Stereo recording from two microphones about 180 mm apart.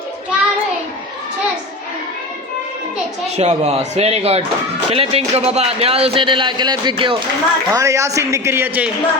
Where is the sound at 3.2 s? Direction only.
35° right (ahead or behind).